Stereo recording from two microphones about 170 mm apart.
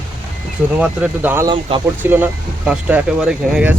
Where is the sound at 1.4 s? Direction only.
30° right (ahead or behind).